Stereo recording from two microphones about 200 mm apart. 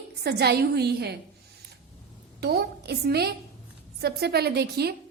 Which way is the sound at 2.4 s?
55° right (ahead or behind).